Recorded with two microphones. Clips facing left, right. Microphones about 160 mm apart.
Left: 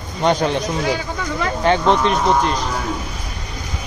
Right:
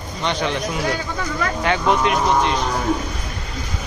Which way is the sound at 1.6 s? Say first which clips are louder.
Left 3 dB; 30° left (ahead or behind).